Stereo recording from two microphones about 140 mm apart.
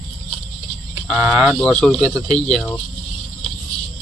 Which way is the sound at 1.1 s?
Centre (ahead or behind).